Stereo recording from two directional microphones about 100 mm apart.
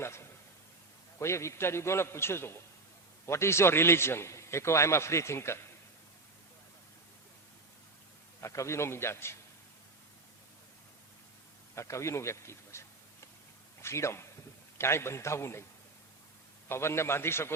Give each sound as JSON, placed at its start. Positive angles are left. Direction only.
{"t": 0.0, "sound": "a sound", "side_deg": 25}
{"t": 1.2, "sound": "a man's voice", "side_deg": 30}
{"t": 8.4, "sound": "a man's voice", "side_deg": 30}
{"t": 11.7, "sound": "speech", "side_deg": 30}
{"t": 13.8, "sound": "a man's voice", "side_deg": 25}
{"t": 16.6, "sound": "a man's voice", "side_deg": 25}